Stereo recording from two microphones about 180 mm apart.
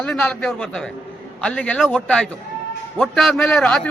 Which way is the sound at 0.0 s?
5° left (ahead or behind).